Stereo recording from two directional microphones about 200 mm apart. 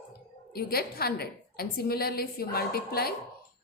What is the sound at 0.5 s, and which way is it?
A woman's voice, 50° left (ahead or behind).